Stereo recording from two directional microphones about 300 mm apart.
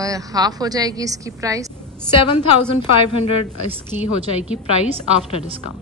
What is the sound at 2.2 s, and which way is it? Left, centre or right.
A woman's voice, centre.